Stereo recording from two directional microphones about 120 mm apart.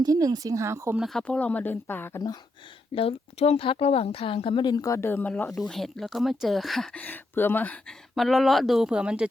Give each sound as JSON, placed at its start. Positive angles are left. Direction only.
{"t": 0.0, "sound": "speech", "side_deg": -30}
{"t": 0.9, "sound": "a woman's voice", "side_deg": 0}
{"t": 2.9, "sound": "a woman's voice", "side_deg": 55}
{"t": 8.1, "sound": "speech", "side_deg": 0}